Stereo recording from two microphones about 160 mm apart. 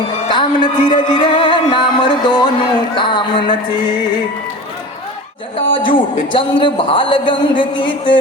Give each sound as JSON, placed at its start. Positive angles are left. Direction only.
{"t": 0.3, "sound": "music", "side_deg": 30}
{"t": 5.5, "sound": "a man's voice", "side_deg": 30}